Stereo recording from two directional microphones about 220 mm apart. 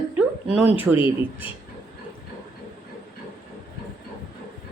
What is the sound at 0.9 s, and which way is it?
Speech, 25° left (ahead or behind).